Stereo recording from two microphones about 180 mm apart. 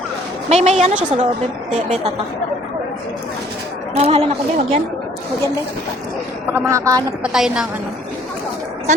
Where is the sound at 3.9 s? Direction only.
35° right (ahead or behind).